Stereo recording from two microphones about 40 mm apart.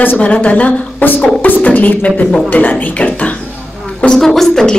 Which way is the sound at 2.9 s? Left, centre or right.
Left.